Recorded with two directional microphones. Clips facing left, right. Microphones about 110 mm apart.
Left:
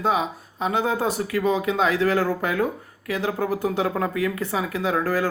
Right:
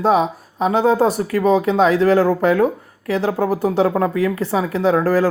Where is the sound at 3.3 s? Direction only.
40° right (ahead or behind).